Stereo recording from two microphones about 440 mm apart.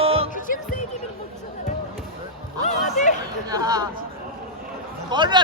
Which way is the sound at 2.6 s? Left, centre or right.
Centre.